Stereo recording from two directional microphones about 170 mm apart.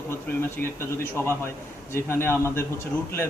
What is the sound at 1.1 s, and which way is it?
A man's voice, 15° left (ahead or behind).